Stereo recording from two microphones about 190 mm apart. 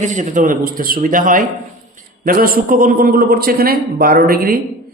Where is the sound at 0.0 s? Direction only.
40° right (ahead or behind).